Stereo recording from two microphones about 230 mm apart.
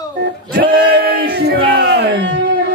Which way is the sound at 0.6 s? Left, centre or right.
Right.